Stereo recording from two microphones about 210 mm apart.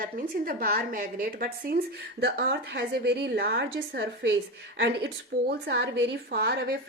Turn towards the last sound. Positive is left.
turn(degrees=-50)  # may be behind; listen again after turning